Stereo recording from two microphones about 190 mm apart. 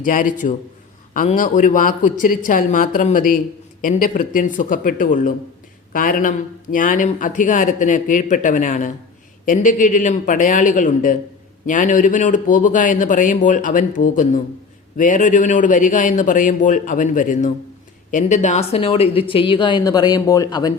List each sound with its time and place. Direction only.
0.0 s a man's voice: 45° left (ahead or behind); by 20.7 s 20° left (ahead or behind)